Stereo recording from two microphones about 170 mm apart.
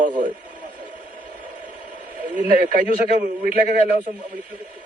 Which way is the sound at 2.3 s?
55° right (ahead or behind).